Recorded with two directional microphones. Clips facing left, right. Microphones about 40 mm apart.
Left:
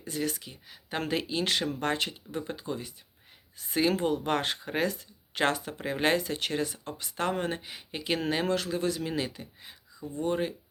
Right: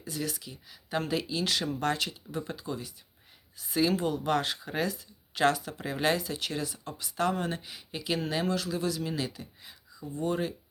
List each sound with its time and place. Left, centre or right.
0.0 s speech: left